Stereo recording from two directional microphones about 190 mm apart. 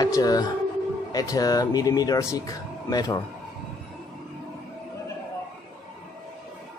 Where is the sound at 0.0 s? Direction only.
20° left (ahead or behind).